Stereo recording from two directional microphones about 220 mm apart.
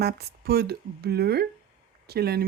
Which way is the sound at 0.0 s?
45° right (ahead or behind).